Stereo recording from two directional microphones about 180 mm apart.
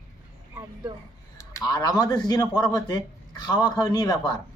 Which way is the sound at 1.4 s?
20° left (ahead or behind).